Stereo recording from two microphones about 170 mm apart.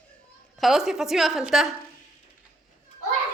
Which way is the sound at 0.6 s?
Centre (ahead or behind).